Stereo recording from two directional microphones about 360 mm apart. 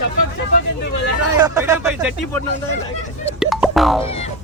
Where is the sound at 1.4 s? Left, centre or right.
Centre.